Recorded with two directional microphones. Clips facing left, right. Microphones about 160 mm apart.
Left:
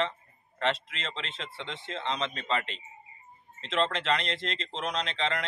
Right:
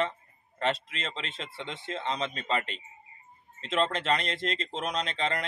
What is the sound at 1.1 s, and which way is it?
Speech, 5° right (ahead or behind).